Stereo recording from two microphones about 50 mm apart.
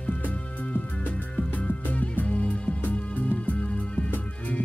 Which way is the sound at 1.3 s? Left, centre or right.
Left.